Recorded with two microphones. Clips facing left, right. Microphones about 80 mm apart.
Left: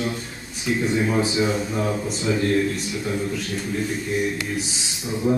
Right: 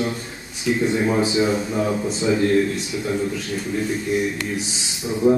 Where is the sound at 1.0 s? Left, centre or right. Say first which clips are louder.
Right 2 dB; centre.